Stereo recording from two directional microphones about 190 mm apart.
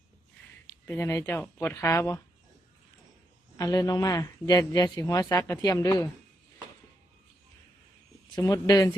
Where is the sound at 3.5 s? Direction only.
20° left (ahead or behind).